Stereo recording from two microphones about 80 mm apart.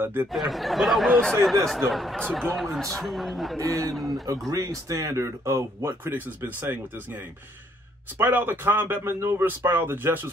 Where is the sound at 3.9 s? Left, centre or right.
Centre.